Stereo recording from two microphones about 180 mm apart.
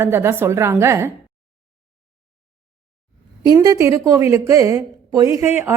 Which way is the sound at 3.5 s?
15° right (ahead or behind).